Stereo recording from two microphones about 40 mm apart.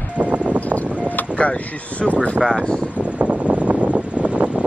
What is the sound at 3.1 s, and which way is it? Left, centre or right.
Wind noise, right.